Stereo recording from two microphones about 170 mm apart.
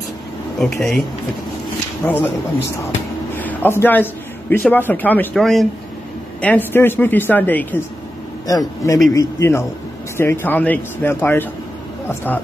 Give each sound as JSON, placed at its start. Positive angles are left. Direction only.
{"t": 0.6, "sound": "speech", "side_deg": 0}
{"t": 2.0, "sound": "speech", "side_deg": 5}
{"t": 3.3, "sound": "a man's voice", "side_deg": 10}